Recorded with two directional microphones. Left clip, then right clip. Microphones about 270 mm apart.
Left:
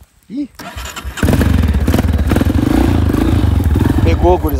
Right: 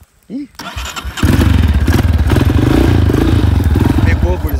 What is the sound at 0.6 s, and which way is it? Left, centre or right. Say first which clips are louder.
Vehicle: right 3 dB; centre.